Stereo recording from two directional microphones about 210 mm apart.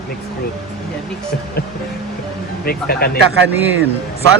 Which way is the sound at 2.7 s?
45° left (ahead or behind).